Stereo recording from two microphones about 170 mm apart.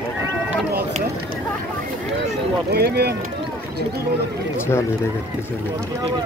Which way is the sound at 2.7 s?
70° right (ahead or behind).